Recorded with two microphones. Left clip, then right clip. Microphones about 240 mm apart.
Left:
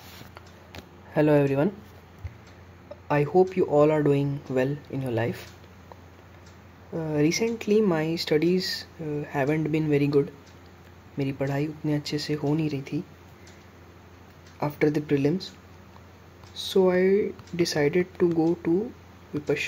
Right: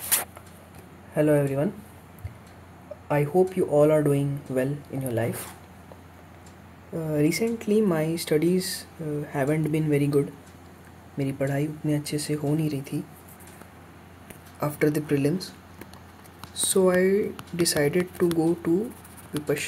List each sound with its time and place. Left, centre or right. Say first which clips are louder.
1.1 s speech: left 1 dB; centre
3.1 s speech: left 1 dB; centre
6.9 s speech: even; centre
14.6 s speech: even; centre
16.5 s speech: right 1 dB; centre